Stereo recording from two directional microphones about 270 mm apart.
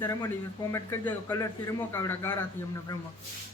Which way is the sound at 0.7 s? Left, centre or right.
Centre.